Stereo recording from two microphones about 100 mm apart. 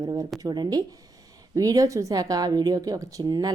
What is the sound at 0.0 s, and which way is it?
Speech, 40° right (ahead or behind).